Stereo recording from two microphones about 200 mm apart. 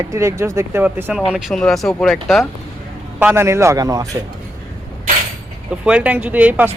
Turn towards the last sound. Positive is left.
turn(degrees=-5)  # may be behind; listen again after turning